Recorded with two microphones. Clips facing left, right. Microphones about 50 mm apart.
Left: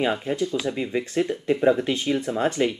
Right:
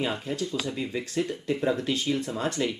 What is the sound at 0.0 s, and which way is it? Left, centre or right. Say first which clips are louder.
Speech: left 6 dB; left.